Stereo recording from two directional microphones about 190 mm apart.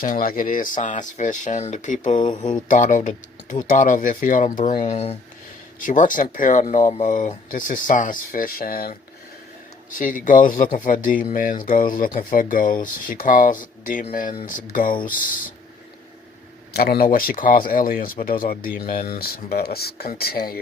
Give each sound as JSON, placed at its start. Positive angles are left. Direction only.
{"t": 0.0, "sound": "speech", "side_deg": 45}
{"t": 10.0, "sound": "speech", "side_deg": 45}
{"t": 16.7, "sound": "speech", "side_deg": 55}